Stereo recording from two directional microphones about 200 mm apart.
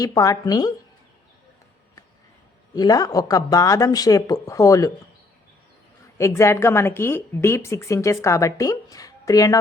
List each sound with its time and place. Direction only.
0.0 s a woman's voice: 20° left (ahead or behind)
2.7 s a woman's voice: 20° left (ahead or behind)
6.1 s a woman's voice: 15° left (ahead or behind)